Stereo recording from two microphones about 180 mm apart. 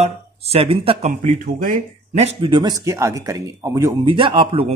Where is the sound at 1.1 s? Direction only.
45° right (ahead or behind).